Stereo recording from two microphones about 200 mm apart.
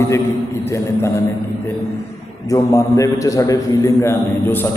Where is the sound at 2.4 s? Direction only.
15° left (ahead or behind).